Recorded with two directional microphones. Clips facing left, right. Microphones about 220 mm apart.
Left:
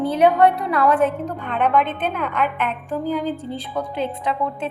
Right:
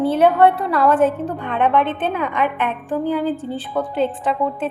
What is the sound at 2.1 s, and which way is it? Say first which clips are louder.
Speech: right 2 dB; 10° right (ahead or behind).